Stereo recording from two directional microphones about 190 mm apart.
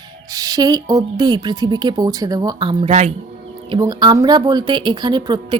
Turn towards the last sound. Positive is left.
turn(degrees=-25)  # may be behind; listen again after turning